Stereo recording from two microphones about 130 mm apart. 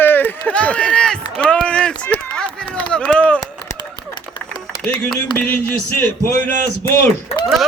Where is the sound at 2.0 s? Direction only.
10° left (ahead or behind).